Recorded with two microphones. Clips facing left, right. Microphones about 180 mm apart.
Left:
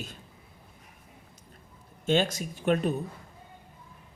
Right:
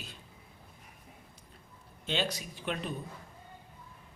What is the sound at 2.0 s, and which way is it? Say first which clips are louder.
Speech: left 8 dB; 45° left (ahead or behind).